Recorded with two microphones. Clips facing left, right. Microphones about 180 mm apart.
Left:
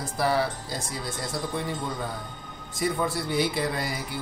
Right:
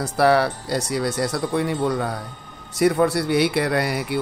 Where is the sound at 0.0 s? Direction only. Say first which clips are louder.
Right 8 dB; 70° right (ahead or behind).